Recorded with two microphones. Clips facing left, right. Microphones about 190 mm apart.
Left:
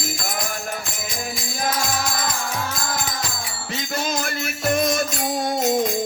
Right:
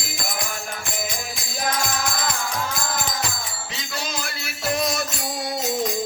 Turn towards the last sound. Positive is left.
turn(degrees=50)  # may be behind; listen again after turning